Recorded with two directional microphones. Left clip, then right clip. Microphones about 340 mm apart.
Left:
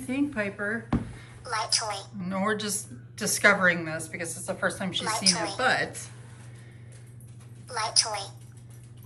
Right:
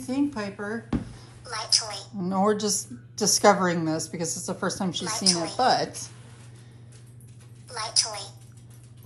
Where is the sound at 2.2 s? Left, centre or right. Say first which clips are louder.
Right 5 dB; centre.